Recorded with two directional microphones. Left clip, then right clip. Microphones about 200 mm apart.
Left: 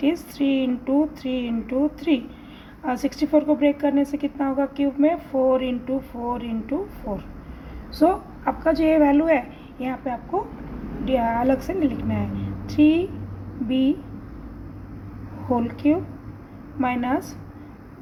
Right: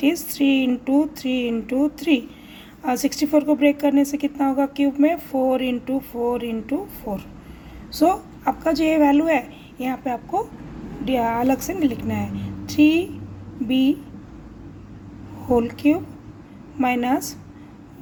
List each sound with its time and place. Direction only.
0.0 s a woman's voice: 40° right (ahead or behind)
7.9 s a woman's voice: 30° right (ahead or behind)
15.5 s a woman's voice: 35° right (ahead or behind)